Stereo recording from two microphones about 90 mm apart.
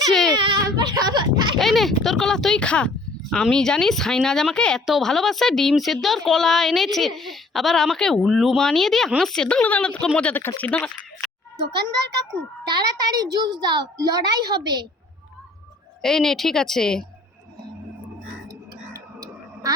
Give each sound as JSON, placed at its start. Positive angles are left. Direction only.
{"t": 0.1, "sound": "baby cry", "side_deg": 5}
{"t": 0.3, "sound": "speech", "side_deg": -65}
{"t": 0.8, "sound": "speech", "side_deg": -45}
{"t": 1.5, "sound": "speech", "side_deg": 0}
{"t": 12.6, "sound": "a child's voice", "side_deg": -50}
{"t": 16.0, "sound": "speech", "side_deg": 5}
{"t": 18.4, "sound": "a sound", "side_deg": -45}